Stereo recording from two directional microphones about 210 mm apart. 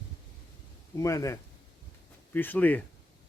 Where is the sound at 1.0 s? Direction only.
15° left (ahead or behind).